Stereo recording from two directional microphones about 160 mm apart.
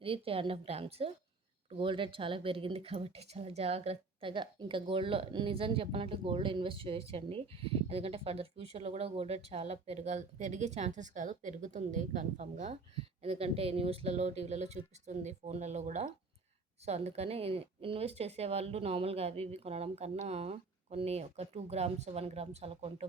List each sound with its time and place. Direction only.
0.0 s a woman's voice: 35° right (ahead or behind)